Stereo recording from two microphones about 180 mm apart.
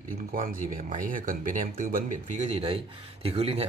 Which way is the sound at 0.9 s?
50° right (ahead or behind).